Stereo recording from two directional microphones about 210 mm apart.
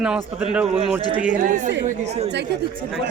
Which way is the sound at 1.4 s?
35° right (ahead or behind).